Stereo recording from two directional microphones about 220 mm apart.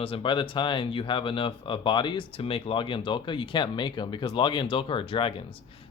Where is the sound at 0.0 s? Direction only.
25° left (ahead or behind).